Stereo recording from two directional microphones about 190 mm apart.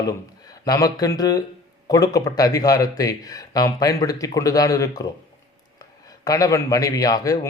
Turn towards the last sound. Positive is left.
turn(degrees=20)  # may be behind; listen again after turning